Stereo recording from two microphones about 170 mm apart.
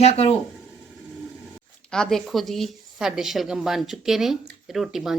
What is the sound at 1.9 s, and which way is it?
A woman's voice, 5° left (ahead or behind).